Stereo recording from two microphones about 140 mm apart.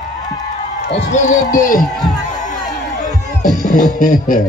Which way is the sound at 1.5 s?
75° left (ahead or behind).